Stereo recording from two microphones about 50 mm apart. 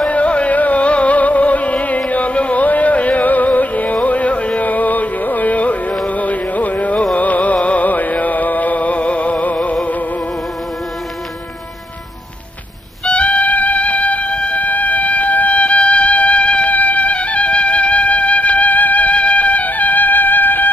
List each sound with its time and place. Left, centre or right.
0.0 s music: left
13.0 s music: left